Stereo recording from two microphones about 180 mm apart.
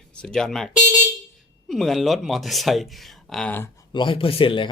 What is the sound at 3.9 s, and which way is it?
Speech, 30° left (ahead or behind).